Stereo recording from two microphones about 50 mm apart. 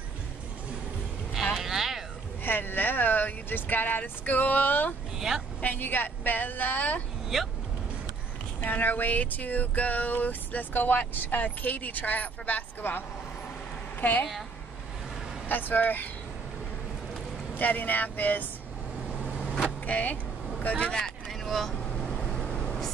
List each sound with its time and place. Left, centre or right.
1.3 s a sound: centre
2.4 s speech: left
5.3 s a woman's voice: centre
5.6 s speech: left
7.3 s speech: centre
8.6 s speech: left
15.4 s speech: left
17.6 s speech: left
19.2 s vehicle: right
19.9 s speech: left
20.9 s vehicle: centre